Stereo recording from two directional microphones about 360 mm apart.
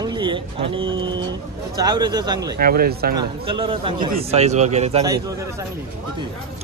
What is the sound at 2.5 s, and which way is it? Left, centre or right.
Speech, right.